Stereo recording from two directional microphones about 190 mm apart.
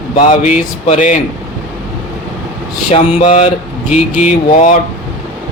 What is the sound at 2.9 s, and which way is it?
Speech, 30° left (ahead or behind).